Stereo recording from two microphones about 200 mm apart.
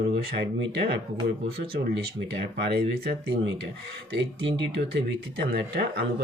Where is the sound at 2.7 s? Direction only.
50° right (ahead or behind).